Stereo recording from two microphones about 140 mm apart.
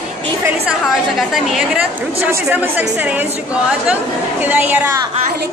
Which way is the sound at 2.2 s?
10° right (ahead or behind).